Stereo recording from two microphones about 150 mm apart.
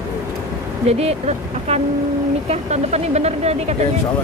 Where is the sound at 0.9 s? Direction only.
45° right (ahead or behind).